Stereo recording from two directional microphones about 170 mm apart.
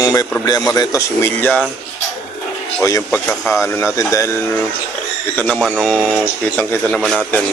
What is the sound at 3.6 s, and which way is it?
A man's voice, 15° left (ahead or behind).